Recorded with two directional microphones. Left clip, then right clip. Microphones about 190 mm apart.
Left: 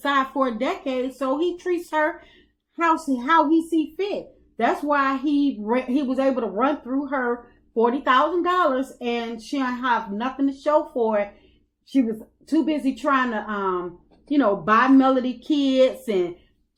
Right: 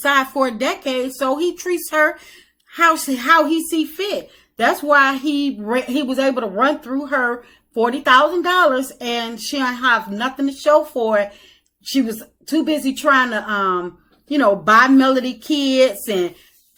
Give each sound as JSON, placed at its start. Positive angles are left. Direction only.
{"t": 0.0, "sound": "a woman's voice", "side_deg": -15}